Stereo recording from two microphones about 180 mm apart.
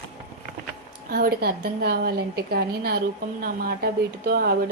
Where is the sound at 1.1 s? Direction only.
55° right (ahead or behind).